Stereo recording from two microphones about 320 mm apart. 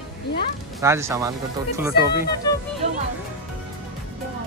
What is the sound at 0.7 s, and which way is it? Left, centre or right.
Speech, centre.